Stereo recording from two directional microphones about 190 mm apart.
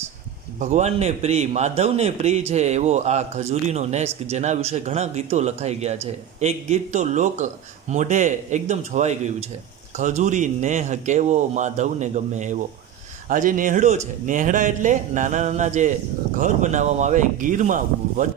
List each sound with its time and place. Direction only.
0.6 s speech: 40° right (ahead or behind)